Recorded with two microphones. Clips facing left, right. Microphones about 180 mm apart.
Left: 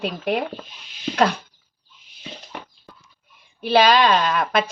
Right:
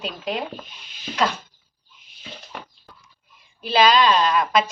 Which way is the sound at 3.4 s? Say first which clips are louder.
Left 2 dB; 60° left (ahead or behind).